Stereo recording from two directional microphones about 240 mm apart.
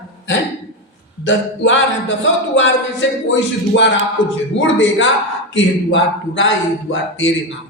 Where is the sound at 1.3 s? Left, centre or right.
Left.